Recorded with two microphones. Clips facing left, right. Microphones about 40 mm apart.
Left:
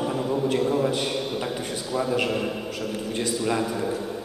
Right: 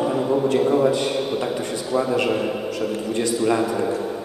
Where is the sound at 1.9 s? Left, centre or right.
Centre.